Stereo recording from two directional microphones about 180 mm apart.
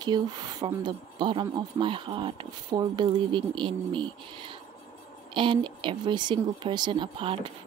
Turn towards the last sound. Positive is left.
turn(degrees=-30)  # may be behind; listen again after turning